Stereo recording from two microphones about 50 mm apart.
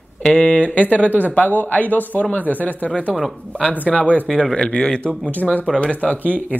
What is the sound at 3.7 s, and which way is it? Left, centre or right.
Speech, left.